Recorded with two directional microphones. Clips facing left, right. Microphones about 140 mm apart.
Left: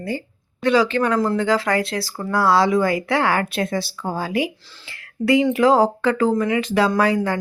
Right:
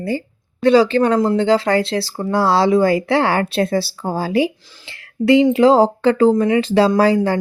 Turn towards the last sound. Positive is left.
turn(degrees=-30)  # may be behind; listen again after turning